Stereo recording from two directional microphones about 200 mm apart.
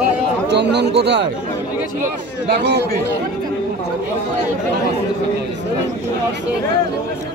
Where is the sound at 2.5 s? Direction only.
55° right (ahead or behind).